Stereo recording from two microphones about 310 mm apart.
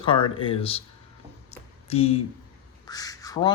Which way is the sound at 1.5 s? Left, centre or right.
Centre.